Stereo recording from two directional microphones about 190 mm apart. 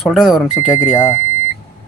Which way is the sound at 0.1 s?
Centre (ahead or behind).